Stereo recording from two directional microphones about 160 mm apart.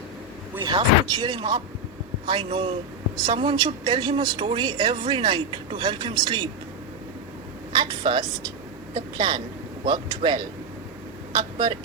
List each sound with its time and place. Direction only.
0.6 s a woman's voice: 30° right (ahead or behind)
7.7 s a woman's voice: 30° right (ahead or behind)
11.3 s speech: 30° right (ahead or behind)